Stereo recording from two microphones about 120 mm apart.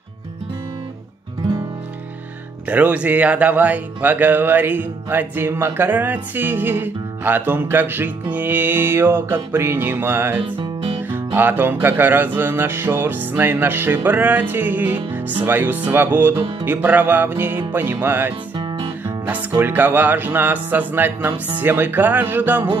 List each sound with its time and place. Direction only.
2.7 s speech: 15° right (ahead or behind)
10.4 s music: 45° right (ahead or behind)
11.1 s speech: 15° right (ahead or behind)
19.0 s music: 15° right (ahead or behind)
19.5 s speech: 15° right (ahead or behind)